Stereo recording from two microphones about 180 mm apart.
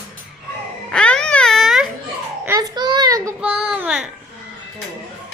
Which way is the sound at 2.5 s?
20° right (ahead or behind).